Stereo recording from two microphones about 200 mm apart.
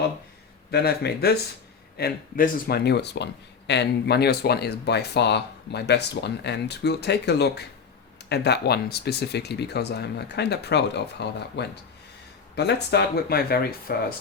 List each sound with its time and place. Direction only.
0.7 s speech: 55° left (ahead or behind)